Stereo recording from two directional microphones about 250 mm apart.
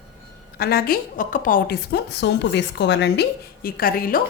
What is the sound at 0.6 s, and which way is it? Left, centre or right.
A woman's voice, left.